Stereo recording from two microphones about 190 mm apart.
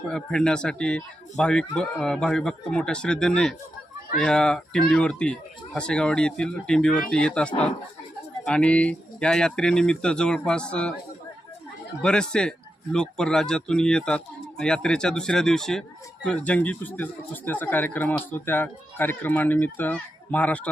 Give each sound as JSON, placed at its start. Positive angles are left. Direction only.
{"t": 0.1, "sound": "speech", "side_deg": 5}
{"t": 12.0, "sound": "speech", "side_deg": 5}